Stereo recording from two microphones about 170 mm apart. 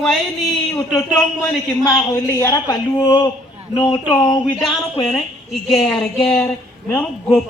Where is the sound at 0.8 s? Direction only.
25° left (ahead or behind).